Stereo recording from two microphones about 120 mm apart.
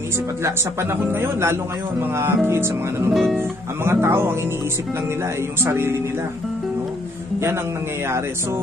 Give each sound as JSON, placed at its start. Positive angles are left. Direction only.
{"t": 1.0, "sound": "speech", "side_deg": -20}
{"t": 3.1, "sound": "speech", "side_deg": 0}
{"t": 3.3, "sound": "speech", "side_deg": -20}
{"t": 5.6, "sound": "speech", "side_deg": -20}